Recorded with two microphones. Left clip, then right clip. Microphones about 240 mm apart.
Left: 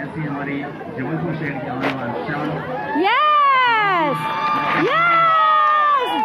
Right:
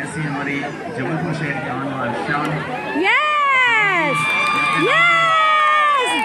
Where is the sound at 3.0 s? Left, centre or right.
Centre.